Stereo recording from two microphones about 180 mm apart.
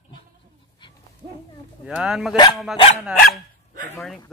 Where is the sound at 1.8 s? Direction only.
5° right (ahead or behind).